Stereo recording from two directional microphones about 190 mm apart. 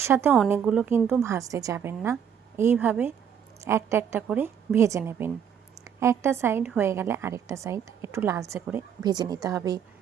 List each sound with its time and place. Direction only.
0.0 s a woman's voice: 15° right (ahead or behind)